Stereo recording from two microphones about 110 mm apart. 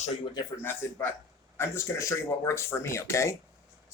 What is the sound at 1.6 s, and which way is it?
Speech, 25° left (ahead or behind).